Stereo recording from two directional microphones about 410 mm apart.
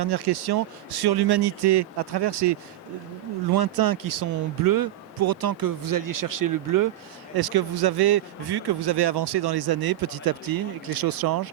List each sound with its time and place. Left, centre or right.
0.0 s speech: right
3.5 s speech: right
7.3 s speech: right